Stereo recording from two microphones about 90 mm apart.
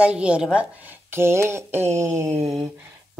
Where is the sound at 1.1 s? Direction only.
30° right (ahead or behind).